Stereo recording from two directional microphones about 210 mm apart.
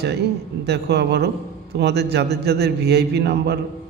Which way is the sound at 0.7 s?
50° right (ahead or behind).